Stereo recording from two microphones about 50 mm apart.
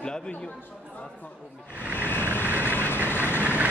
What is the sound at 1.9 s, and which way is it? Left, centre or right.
Vehicle, left.